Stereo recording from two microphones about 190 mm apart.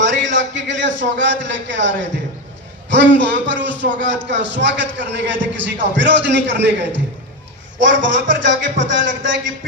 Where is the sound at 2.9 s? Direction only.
70° right (ahead or behind).